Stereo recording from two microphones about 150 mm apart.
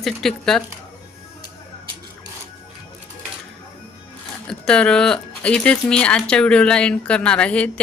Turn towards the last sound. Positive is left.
turn(degrees=10)  # may be behind; listen again after turning